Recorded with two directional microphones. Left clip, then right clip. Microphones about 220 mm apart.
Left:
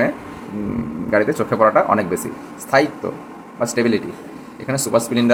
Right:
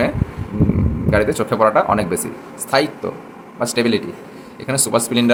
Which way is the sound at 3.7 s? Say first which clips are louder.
Right 1 dB; 20° right (ahead or behind).